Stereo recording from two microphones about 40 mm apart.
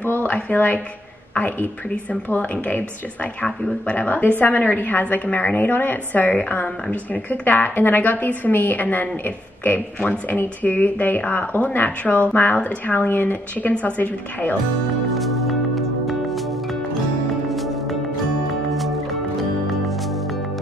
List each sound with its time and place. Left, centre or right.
0.0 s a sound: left
0.3 s a woman's voice: left
3.4 s speech: left
3.9 s a woman's voice: left
12.0 s a woman's voice: left
15.1 s music: centre
18.7 s music: centre